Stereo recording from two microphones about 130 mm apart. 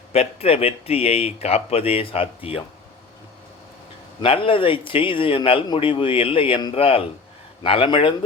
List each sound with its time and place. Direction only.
0.1 s speech: 50° left (ahead or behind)
4.2 s speech: 45° left (ahead or behind)